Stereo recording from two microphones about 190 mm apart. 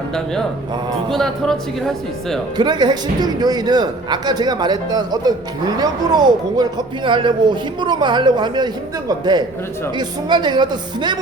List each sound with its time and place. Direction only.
1.1 s speech: centre (ahead or behind)
2.6 s a man's voice: 20° right (ahead or behind)